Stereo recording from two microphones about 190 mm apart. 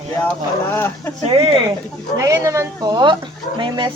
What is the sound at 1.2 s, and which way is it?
Speech, 30° right (ahead or behind).